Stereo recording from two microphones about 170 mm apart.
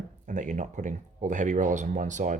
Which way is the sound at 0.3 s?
50° right (ahead or behind).